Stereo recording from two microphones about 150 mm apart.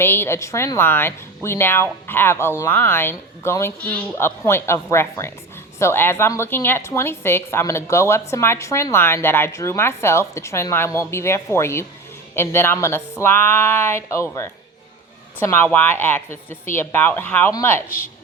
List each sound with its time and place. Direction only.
0.0 s a woman's voice: 15° left (ahead or behind)